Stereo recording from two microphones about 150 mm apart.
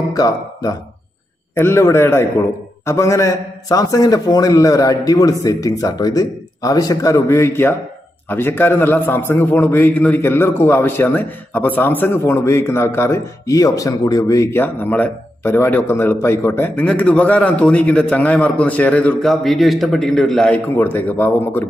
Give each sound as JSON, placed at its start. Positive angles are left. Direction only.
{"t": 0.1, "sound": "a man's voice", "side_deg": 25}